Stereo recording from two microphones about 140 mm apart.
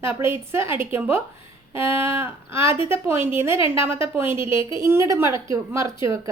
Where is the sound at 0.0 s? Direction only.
20° right (ahead or behind).